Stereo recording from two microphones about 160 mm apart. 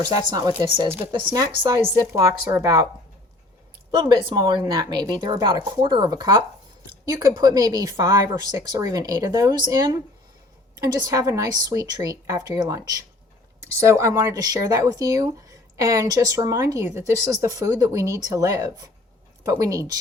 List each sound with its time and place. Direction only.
0.0 s speech: 25° right (ahead or behind)
3.9 s speech: 30° right (ahead or behind)